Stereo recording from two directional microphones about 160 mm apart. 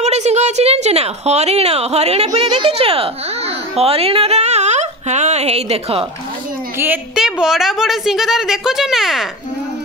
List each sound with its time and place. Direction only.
0.0 s a woman's voice: 45° right (ahead or behind)
7.2 s a woman's voice: 5° right (ahead or behind)